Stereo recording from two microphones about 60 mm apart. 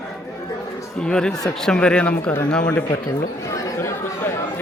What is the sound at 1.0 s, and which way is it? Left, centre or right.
Speech, centre.